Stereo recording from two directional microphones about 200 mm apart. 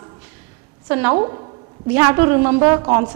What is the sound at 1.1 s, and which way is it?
Speech, 25° right (ahead or behind).